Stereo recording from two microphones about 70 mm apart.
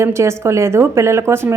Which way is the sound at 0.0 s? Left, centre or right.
Right.